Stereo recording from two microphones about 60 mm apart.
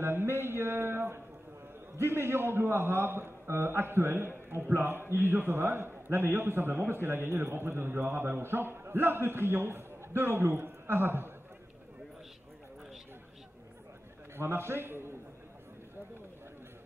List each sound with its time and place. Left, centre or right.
0.0 s a sound: right
2.0 s a man's voice: right
14.3 s a man's voice: right